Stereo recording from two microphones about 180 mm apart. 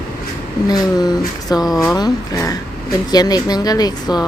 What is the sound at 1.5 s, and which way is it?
Speech, 20° left (ahead or behind).